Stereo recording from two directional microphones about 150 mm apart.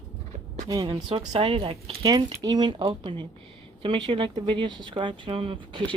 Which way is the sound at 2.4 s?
30° right (ahead or behind).